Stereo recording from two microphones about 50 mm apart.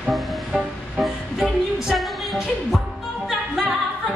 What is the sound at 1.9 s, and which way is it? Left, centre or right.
Music, centre.